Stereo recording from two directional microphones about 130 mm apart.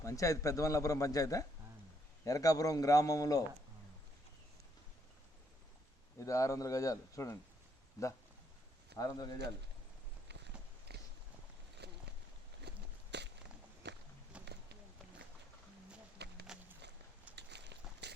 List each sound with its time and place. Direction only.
0.0 s speech: 25° left (ahead or behind)
6.1 s speech: 25° left (ahead or behind)
14.3 s run: 10° right (ahead or behind)
16.5 s walk: 5° right (ahead or behind)
17.3 s a sound: 10° right (ahead or behind)